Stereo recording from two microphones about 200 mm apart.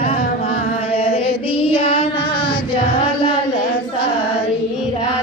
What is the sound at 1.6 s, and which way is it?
Child singing, 25° left (ahead or behind).